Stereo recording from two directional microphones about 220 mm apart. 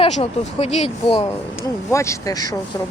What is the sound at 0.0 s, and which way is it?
Speech, 25° left (ahead or behind).